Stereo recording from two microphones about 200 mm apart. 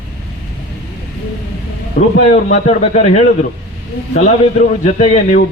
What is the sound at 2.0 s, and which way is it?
A man's voice, 40° left (ahead or behind).